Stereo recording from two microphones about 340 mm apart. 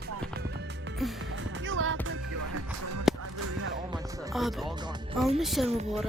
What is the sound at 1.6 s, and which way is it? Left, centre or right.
Music, right.